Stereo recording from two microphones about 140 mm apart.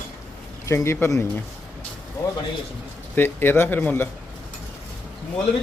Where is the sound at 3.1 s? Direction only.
15° left (ahead or behind).